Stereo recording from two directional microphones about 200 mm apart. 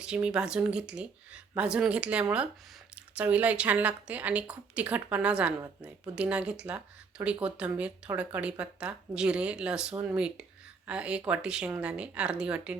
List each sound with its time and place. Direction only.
0.0 s speech: 5° right (ahead or behind)